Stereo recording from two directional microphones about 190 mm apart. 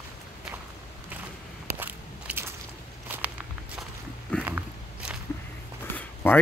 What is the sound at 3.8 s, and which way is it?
Walk, 5° left (ahead or behind).